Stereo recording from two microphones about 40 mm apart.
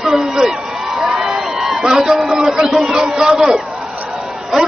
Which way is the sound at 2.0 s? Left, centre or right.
Centre.